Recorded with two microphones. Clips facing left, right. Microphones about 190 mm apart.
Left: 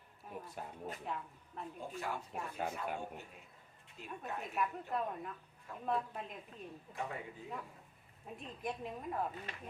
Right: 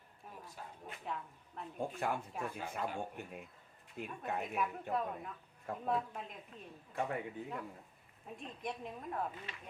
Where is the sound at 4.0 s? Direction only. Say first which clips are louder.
Right 7 dB; 55° right (ahead or behind).